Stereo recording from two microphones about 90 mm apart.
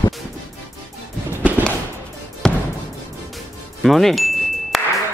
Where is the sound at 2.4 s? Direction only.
10° left (ahead or behind).